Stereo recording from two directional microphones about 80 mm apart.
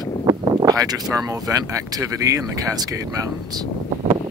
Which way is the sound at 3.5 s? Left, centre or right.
Right.